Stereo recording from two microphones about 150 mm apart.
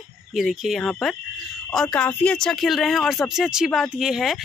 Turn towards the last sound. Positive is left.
turn(degrees=0)  # may be behind; listen again after turning